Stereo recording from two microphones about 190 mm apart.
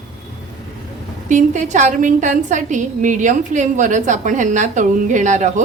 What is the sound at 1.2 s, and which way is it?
A woman's voice, 40° right (ahead or behind).